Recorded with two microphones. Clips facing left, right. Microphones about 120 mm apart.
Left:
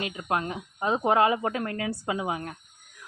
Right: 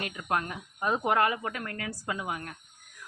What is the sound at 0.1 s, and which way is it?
A woman's voice, 15° left (ahead or behind).